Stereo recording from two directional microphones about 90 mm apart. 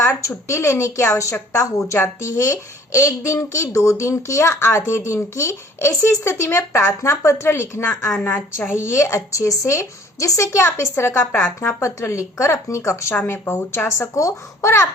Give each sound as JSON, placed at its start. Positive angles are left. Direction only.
{"t": 0.0, "sound": "a woman's voice", "side_deg": 35}
{"t": 9.0, "sound": "a woman's voice", "side_deg": 35}